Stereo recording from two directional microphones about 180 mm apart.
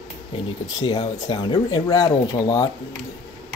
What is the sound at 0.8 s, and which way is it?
Speech, 25° left (ahead or behind).